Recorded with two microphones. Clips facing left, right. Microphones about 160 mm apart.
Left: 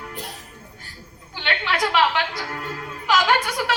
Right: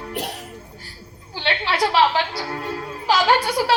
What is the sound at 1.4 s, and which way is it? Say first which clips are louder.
Music: right 3 dB; 35° right (ahead or behind).